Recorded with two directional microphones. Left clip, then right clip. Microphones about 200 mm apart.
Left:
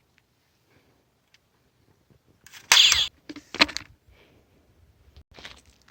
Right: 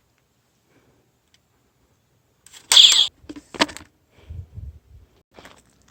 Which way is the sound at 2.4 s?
10° right (ahead or behind).